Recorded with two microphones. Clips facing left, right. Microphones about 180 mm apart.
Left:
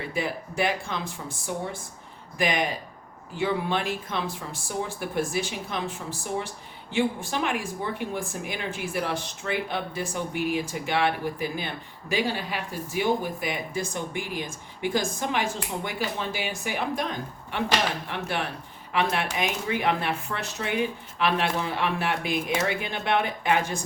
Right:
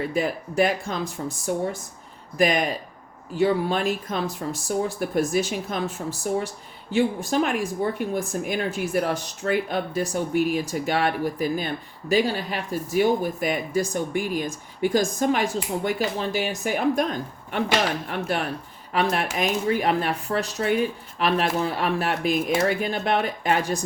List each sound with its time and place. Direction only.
0.1 s speech: 40° right (ahead or behind)
18.1 s speech: 40° right (ahead or behind)